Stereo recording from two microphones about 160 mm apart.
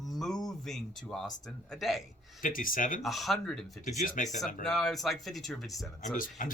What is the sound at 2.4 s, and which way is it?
Speech, 60° left (ahead or behind).